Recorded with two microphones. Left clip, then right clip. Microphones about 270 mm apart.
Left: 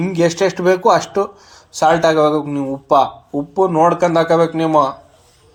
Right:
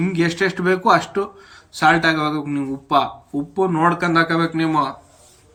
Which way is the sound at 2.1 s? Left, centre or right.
Right.